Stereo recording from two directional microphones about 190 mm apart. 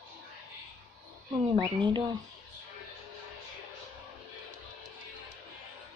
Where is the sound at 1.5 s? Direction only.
25° right (ahead or behind).